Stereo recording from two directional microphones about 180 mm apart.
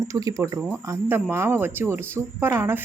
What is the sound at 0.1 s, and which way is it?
Speech, 20° right (ahead or behind).